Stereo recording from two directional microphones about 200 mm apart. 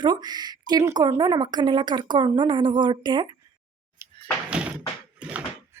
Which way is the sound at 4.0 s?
15° right (ahead or behind).